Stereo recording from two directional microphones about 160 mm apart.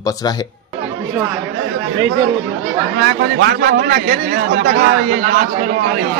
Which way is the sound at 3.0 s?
90° right.